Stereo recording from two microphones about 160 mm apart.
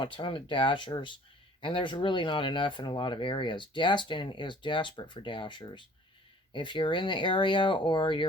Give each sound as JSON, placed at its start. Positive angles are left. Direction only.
{"t": 0.0, "sound": "speech", "side_deg": 30}